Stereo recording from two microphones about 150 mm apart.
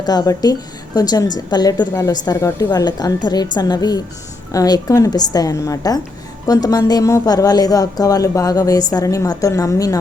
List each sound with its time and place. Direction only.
0.0 s speech: 25° left (ahead or behind)